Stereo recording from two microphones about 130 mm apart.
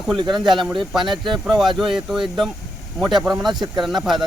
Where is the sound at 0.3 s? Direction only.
Centre (ahead or behind).